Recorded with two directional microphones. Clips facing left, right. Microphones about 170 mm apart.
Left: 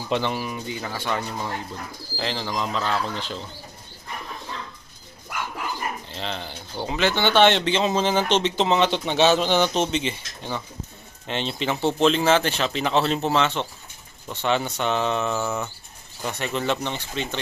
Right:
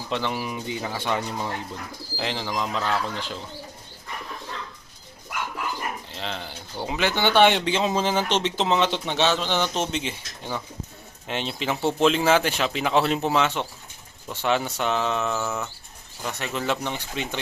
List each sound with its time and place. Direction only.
0.1 s speech: 5° right (ahead or behind)
0.4 s speech: 15° right (ahead or behind)
6.1 s speech: centre (ahead or behind)
9.7 s speech: 5° right (ahead or behind)